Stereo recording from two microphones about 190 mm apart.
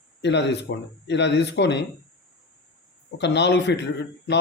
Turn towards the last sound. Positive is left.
turn(degrees=65)  # may be behind; listen again after turning